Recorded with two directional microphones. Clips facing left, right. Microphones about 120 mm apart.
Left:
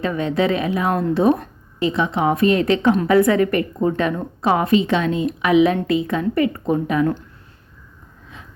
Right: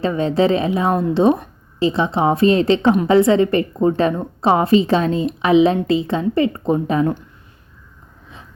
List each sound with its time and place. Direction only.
0.0 s a woman's voice: 30° right (ahead or behind)